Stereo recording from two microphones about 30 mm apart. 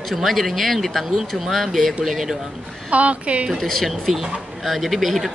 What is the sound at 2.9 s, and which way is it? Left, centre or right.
Speech, right.